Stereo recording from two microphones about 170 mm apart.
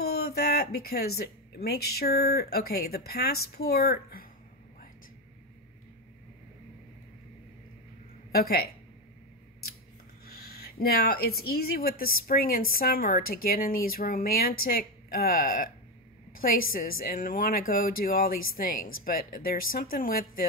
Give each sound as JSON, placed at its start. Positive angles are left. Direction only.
{"t": 0.0, "sound": "speech", "side_deg": 65}
{"t": 8.3, "sound": "speech", "side_deg": 65}
{"t": 10.2, "sound": "speech", "side_deg": 65}